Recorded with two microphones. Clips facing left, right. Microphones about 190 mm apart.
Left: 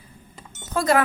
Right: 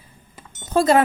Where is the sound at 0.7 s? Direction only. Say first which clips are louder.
Right 4 dB; 25° right (ahead or behind).